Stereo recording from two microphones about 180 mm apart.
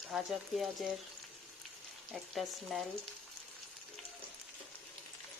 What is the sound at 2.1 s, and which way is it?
Speech, centre (ahead or behind).